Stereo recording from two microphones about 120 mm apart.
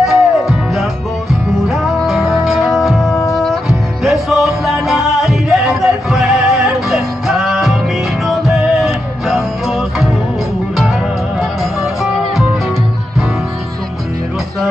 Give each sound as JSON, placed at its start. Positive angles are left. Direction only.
{"t": 0.0, "sound": "music", "side_deg": 0}